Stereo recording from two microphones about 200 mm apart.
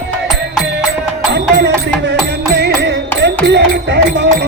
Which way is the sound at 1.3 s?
55° right (ahead or behind).